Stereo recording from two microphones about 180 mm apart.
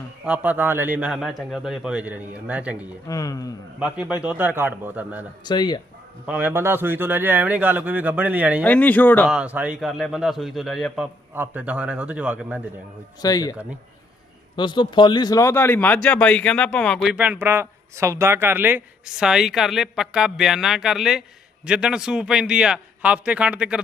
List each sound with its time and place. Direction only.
0.3 s a man's voice: 10° right (ahead or behind)
3.1 s speech: 20° left (ahead or behind)
3.8 s a man's voice: 5° right (ahead or behind)
5.5 s speech: 25° left (ahead or behind)
6.2 s a man's voice: 10° right (ahead or behind)
8.6 s speech: 10° left (ahead or behind)
9.3 s speech: 5° right (ahead or behind)
13.2 s speech: 20° left (ahead or behind); by 23.8 s 5° right (ahead or behind)